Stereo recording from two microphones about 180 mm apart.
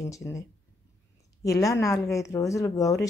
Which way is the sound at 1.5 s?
15° left (ahead or behind).